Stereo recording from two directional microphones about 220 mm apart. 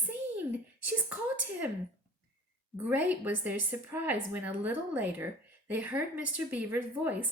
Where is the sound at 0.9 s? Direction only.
5° right (ahead or behind).